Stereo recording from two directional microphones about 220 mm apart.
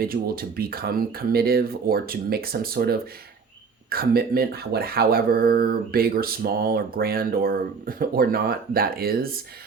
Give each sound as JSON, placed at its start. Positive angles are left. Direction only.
{"t": 0.0, "sound": "speech", "side_deg": -40}